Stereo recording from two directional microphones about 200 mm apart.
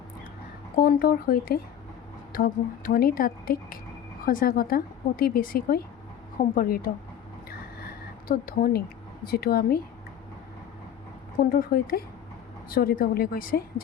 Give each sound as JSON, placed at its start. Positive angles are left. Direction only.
{"t": 0.8, "sound": "a woman's voice", "side_deg": 45}
{"t": 8.3, "sound": "a woman's voice", "side_deg": 50}
{"t": 11.4, "sound": "a woman's voice", "side_deg": 45}